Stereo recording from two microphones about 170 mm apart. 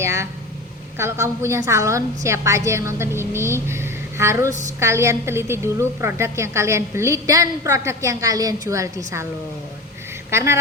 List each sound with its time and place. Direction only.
0.0 s a woman's voice: 15° right (ahead or behind)
10.3 s a woman's voice: 15° right (ahead or behind)